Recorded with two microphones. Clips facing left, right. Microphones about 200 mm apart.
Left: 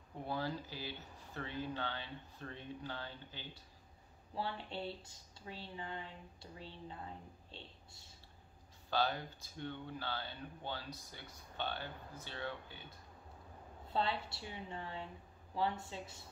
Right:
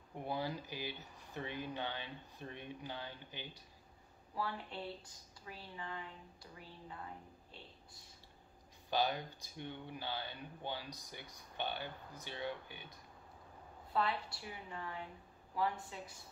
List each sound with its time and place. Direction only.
0.1 s speech: 15° right (ahead or behind)
4.4 s speech: 25° left (ahead or behind)
8.9 s speech: 15° right (ahead or behind)
13.9 s speech: 25° left (ahead or behind)